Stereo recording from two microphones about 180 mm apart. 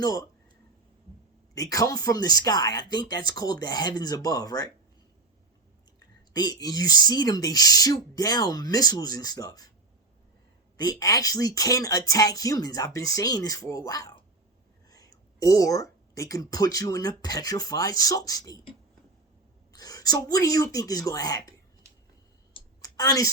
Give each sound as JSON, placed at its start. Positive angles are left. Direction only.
{"t": 0.0, "sound": "speech", "side_deg": 20}
{"t": 1.5, "sound": "speech", "side_deg": 20}
{"t": 6.3, "sound": "speech", "side_deg": 20}
{"t": 10.8, "sound": "speech", "side_deg": 20}
{"t": 19.7, "sound": "speech", "side_deg": 20}
{"t": 22.5, "sound": "a sound", "side_deg": 20}